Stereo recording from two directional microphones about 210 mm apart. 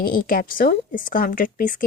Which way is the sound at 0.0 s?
45° left (ahead or behind).